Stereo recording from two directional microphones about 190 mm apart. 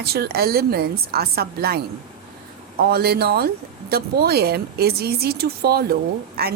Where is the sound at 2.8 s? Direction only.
55° right (ahead or behind).